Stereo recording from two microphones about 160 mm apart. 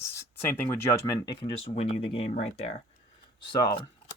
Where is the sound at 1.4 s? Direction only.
40° left (ahead or behind).